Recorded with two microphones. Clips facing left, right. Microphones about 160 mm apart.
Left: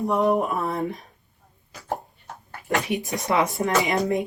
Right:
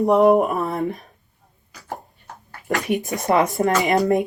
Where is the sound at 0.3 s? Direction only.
75° right (ahead or behind).